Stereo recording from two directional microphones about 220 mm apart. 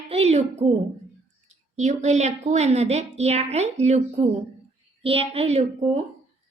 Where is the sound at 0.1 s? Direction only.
30° right (ahead or behind).